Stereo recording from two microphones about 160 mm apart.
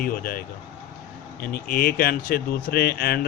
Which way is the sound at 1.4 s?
70° left (ahead or behind).